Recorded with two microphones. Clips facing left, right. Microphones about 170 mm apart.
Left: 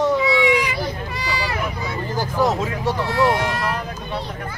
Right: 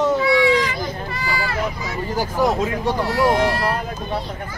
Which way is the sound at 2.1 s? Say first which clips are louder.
Right 1 dB; 15° right (ahead or behind).